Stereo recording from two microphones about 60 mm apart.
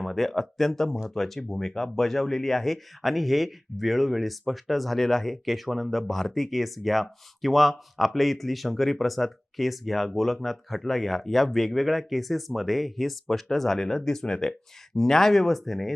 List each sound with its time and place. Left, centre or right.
0.0 s speech: centre